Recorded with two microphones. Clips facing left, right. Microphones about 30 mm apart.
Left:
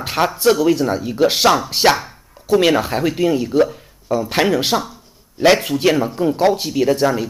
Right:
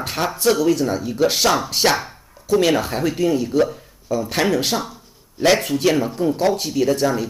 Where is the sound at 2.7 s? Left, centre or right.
Centre.